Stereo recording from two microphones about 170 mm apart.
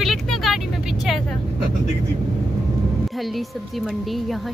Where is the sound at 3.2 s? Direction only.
Centre (ahead or behind).